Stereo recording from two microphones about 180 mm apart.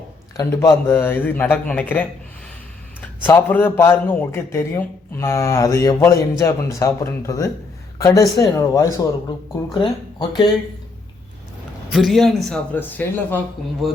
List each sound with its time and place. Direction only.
0.3 s a man's voice: 15° left (ahead or behind)
11.9 s a man's voice: centre (ahead or behind)